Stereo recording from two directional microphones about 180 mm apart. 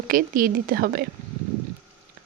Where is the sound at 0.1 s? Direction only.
50° right (ahead or behind).